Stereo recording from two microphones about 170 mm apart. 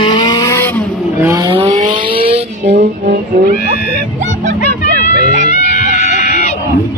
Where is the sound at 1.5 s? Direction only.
30° right (ahead or behind).